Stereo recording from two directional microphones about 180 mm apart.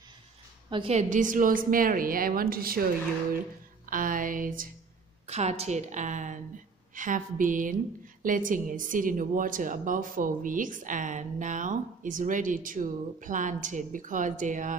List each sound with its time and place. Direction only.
0.7 s a woman's voice: 30° right (ahead or behind); by 2.8 s 55° right (ahead or behind)
3.9 s a woman's voice: 50° right (ahead or behind)
5.2 s a woman's voice: 40° right (ahead or behind)